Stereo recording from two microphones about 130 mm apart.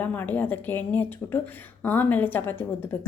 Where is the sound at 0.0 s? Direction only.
15° left (ahead or behind).